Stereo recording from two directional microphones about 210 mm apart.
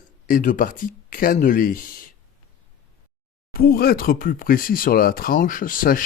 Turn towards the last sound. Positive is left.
turn(degrees=40)  # may be behind; listen again after turning